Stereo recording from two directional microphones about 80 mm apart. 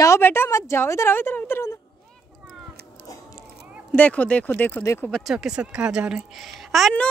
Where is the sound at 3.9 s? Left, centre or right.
Centre.